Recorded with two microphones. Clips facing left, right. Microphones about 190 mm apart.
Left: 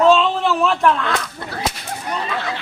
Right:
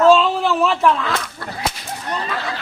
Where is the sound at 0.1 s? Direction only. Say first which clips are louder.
Right 1 dB; 5° right (ahead or behind).